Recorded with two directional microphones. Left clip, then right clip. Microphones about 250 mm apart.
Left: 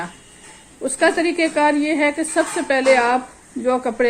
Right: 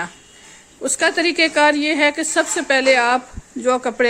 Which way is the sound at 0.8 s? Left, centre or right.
Right.